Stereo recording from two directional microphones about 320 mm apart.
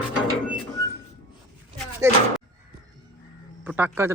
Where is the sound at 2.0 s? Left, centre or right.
Centre.